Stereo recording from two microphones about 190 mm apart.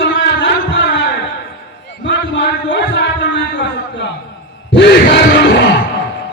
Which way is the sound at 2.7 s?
65° left (ahead or behind).